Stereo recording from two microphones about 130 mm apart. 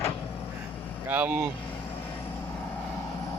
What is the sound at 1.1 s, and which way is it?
Speech, 10° right (ahead or behind).